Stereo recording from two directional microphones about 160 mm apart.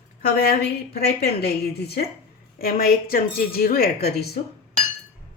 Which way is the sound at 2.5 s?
65° left (ahead or behind).